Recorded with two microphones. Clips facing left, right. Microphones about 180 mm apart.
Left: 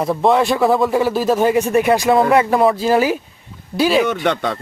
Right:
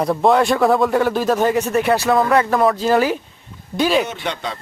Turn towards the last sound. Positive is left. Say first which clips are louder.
# left 7 dB
turn(degrees=60)  # may be behind; listen again after turning